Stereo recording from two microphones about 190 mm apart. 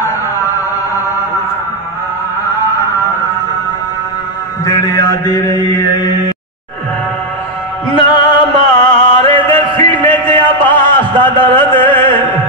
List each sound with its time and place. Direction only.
4.6 s mantra: 20° left (ahead or behind)
7.9 s music: 25° left (ahead or behind)
9.5 s a sound: 10° left (ahead or behind)
10.7 s music: 10° left (ahead or behind)